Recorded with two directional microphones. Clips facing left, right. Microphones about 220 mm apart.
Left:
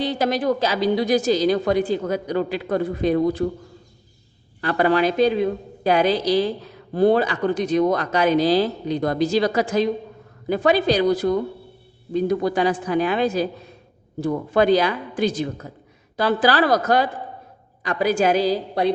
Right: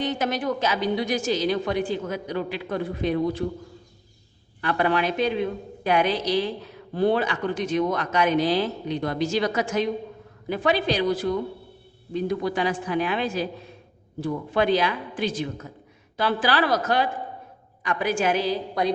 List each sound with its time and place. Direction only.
0.0 s a woman's voice: 35° left (ahead or behind)
4.6 s a woman's voice: 40° left (ahead or behind)